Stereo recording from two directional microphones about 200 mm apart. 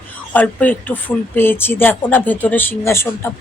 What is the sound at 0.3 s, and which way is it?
Speech, 10° left (ahead or behind).